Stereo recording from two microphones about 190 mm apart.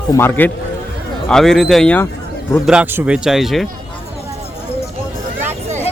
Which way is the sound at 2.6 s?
5° right (ahead or behind).